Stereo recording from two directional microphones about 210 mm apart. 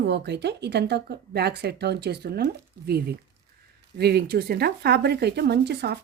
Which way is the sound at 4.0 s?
50° right (ahead or behind).